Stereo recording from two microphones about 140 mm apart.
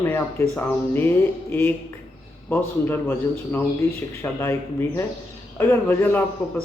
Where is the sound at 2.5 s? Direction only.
15° left (ahead or behind).